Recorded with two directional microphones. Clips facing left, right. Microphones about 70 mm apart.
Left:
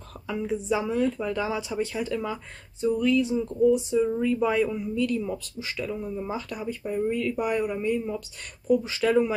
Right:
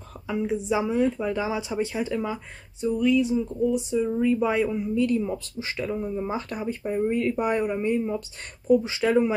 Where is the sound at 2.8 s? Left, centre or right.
Centre.